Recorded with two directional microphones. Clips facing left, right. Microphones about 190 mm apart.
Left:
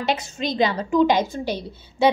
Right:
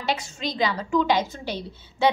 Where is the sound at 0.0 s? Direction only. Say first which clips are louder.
Left 3 dB; 20° left (ahead or behind).